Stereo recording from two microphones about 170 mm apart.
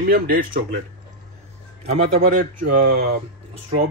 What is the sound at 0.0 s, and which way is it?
Speech, 60° right (ahead or behind).